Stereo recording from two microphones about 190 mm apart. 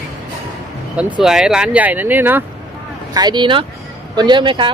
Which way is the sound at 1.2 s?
5° right (ahead or behind).